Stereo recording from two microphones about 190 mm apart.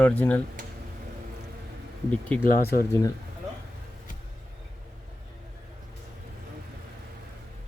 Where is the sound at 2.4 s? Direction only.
50° left (ahead or behind).